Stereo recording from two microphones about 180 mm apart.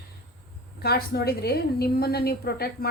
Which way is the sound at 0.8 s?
60° left (ahead or behind).